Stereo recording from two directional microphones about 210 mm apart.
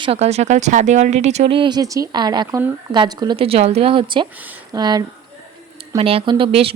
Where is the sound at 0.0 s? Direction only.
30° right (ahead or behind).